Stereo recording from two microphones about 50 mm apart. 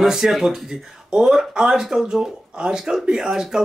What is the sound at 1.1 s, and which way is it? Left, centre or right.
Mantra, centre.